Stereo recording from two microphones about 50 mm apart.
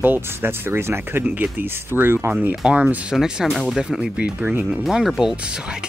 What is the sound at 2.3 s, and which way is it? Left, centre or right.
Speech, right.